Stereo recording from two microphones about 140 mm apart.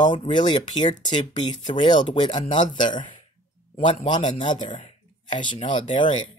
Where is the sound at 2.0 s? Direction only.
60° left (ahead or behind).